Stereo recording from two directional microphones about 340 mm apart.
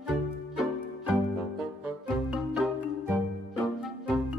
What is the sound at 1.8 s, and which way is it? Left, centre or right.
Music, centre.